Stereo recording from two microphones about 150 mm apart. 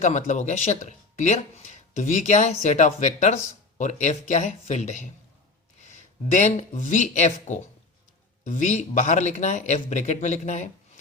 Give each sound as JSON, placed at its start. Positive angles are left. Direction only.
{"t": 0.0, "sound": "speech", "side_deg": 50}
{"t": 6.3, "sound": "speech", "side_deg": 50}